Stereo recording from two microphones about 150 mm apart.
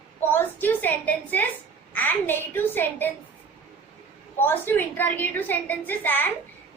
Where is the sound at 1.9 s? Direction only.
10° left (ahead or behind).